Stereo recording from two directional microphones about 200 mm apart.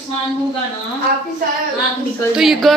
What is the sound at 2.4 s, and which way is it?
Speech, centre (ahead or behind).